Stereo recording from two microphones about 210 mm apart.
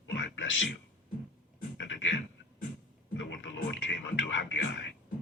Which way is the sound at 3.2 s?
60° left (ahead or behind).